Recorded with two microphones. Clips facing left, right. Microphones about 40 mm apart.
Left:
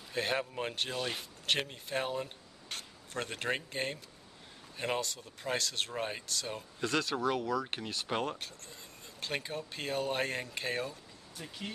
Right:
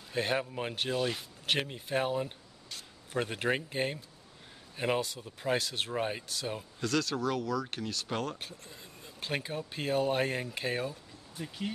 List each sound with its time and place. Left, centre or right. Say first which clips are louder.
0.1 s speech: right 2 dB; centre
2.7 s a sound: left 3 dB; left
3.1 s speech: right 4 dB; centre
6.8 s speech: right 1 dB; left
8.4 s speech: right 1 dB; centre